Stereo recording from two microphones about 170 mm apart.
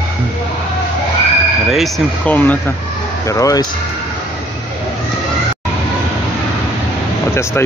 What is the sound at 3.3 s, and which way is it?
Speech, 20° left (ahead or behind).